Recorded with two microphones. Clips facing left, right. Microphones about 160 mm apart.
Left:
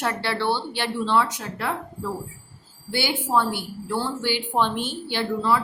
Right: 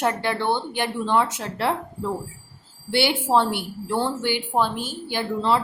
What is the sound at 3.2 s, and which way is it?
Speech, 25° right (ahead or behind).